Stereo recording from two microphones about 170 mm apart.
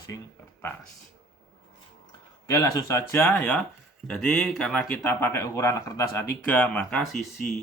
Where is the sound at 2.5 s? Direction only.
20° left (ahead or behind); by 7.3 s centre (ahead or behind).